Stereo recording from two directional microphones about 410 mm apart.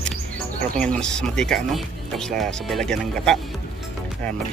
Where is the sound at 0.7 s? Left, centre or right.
Centre.